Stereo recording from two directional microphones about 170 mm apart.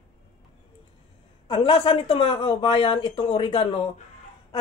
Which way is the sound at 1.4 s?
30° left (ahead or behind).